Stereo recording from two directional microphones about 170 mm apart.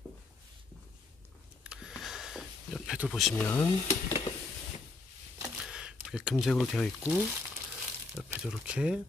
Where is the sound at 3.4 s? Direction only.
15° left (ahead or behind).